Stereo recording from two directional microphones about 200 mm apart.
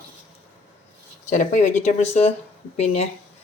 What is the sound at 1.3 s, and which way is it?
Speech, 40° left (ahead or behind).